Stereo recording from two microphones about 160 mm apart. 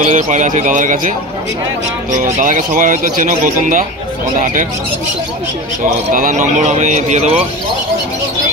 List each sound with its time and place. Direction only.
0.0 s a man's voice: 50° right (ahead or behind)
2.4 s speech: 55° right (ahead or behind)
6.1 s a man's voice: 55° right (ahead or behind)